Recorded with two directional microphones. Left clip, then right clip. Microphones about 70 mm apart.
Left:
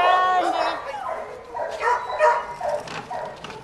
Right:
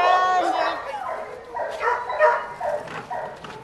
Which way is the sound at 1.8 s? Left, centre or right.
Left.